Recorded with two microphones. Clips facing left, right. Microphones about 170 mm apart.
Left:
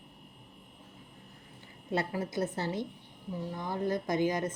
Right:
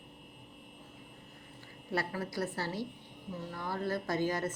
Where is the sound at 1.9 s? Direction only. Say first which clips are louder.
Left 3 dB; 20° left (ahead or behind).